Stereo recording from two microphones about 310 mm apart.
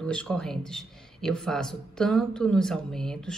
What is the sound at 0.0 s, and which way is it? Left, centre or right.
A man's voice, centre.